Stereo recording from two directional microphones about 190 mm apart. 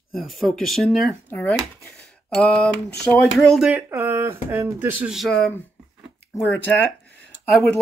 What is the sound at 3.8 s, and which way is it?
Speech, 15° right (ahead or behind).